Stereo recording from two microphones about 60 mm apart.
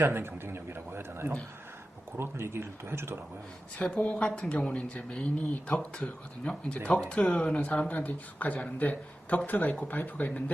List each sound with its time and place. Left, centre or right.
0.0 s a sound: right
2.1 s speech: right
3.8 s speech: centre